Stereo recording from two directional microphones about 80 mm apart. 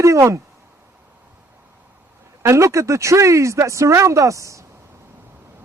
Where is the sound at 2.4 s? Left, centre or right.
Right.